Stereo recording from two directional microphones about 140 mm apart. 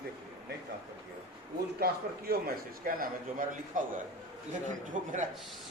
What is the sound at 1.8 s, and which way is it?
A man's voice, 90° right.